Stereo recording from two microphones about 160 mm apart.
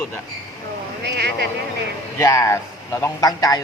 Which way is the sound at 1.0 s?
90° right.